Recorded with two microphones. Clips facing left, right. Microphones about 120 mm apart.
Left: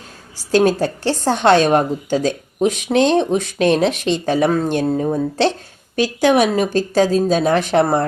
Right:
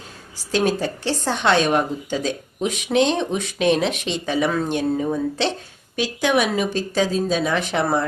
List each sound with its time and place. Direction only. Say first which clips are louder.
0.5 s a woman's voice: left 6 dB; 40° left (ahead or behind)